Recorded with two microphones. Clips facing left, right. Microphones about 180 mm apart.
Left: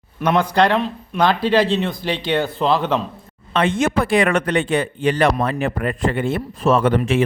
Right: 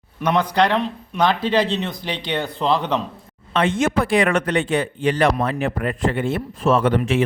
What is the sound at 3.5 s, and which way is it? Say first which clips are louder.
A man's voice: left 1 dB; 55° left (ahead or behind).